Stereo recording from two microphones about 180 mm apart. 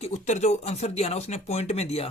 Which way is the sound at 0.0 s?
40° left (ahead or behind).